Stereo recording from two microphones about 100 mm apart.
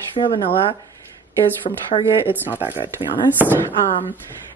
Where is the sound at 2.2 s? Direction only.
20° right (ahead or behind).